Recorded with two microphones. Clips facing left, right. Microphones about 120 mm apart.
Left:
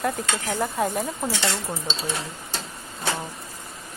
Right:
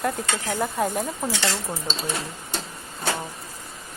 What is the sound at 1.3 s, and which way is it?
Speech, 20° left (ahead or behind).